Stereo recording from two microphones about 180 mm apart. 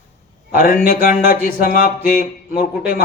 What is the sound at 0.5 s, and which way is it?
Speech, 50° left (ahead or behind).